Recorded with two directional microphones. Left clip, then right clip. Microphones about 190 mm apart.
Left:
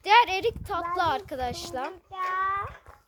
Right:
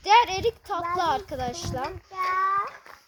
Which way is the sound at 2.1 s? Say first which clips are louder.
Right 4 dB; 40° right (ahead or behind).